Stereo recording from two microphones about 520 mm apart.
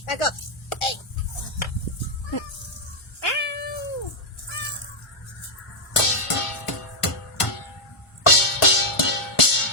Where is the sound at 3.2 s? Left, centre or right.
Left.